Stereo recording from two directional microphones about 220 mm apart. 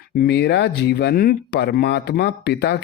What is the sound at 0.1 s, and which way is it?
Speech, 45° left (ahead or behind).